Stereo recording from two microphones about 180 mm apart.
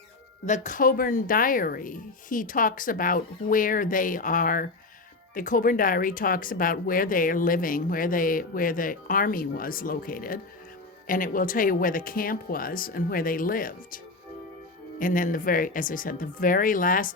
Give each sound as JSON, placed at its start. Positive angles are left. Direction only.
{"t": 0.4, "sound": "speech", "side_deg": 45}